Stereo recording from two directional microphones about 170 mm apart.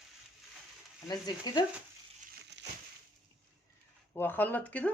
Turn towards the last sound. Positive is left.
turn(degrees=10)  # may be behind; listen again after turning